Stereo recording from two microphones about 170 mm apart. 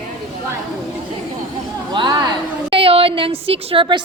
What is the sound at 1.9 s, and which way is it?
A woman's voice, 25° right (ahead or behind).